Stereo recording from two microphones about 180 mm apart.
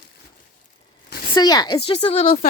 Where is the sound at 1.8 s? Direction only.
35° left (ahead or behind).